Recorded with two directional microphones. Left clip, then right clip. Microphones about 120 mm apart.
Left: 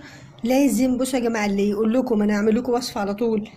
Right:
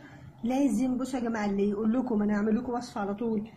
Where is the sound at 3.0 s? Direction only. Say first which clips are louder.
Left 9 dB; 35° left (ahead or behind).